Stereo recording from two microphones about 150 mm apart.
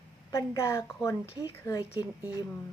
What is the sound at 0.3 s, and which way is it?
Speech, 20° left (ahead or behind).